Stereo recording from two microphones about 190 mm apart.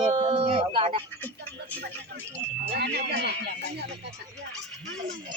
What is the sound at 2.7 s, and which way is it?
Speech, 60° right (ahead or behind).